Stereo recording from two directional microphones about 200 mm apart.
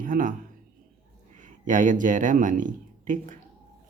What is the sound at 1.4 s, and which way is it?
Speech, 40° right (ahead or behind).